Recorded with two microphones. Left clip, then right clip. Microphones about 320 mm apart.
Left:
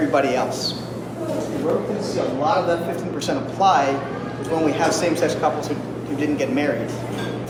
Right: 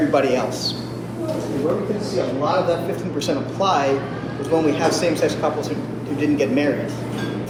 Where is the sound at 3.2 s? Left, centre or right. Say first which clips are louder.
Left 1 dB; centre.